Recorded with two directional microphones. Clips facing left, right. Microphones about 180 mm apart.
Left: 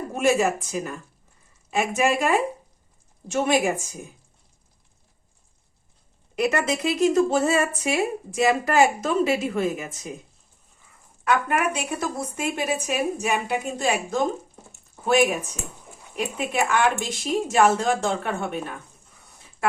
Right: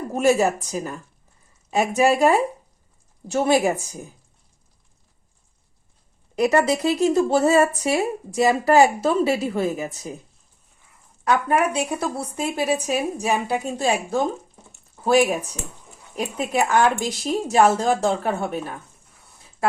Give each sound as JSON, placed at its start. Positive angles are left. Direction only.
{"t": 0.1, "sound": "a woman's voice", "side_deg": -35}
{"t": 6.3, "sound": "a woman's voice", "side_deg": -35}
{"t": 11.3, "sound": "a woman's voice", "side_deg": -30}
{"t": 16.1, "sound": "a woman's voice", "side_deg": -35}